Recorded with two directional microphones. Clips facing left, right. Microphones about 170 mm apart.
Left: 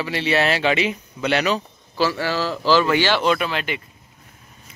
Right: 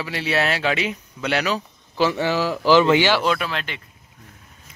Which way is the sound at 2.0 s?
20° right (ahead or behind).